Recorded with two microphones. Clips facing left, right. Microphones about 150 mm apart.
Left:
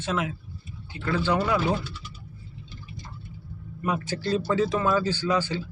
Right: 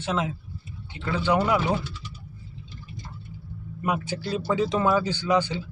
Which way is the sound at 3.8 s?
10° right (ahead or behind).